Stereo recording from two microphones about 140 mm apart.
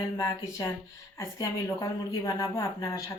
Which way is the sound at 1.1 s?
25° left (ahead or behind).